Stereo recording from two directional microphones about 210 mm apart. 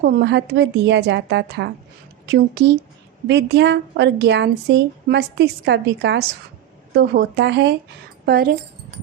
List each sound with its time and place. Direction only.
0.0 s a woman's voice: 50° right (ahead or behind)